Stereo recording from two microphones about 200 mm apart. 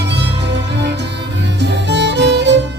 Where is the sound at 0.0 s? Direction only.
60° right (ahead or behind).